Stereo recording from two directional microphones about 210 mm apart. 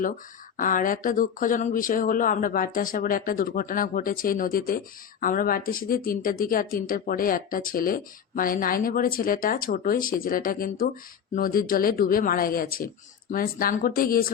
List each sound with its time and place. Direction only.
0.5 s speech: 40° left (ahead or behind)